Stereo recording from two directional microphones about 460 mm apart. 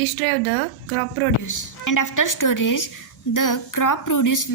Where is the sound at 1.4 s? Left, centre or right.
Left.